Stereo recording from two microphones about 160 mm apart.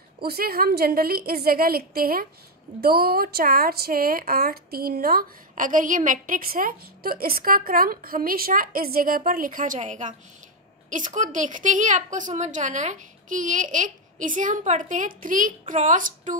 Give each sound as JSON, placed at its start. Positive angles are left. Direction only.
{"t": 0.2, "sound": "a woman's voice", "side_deg": -70}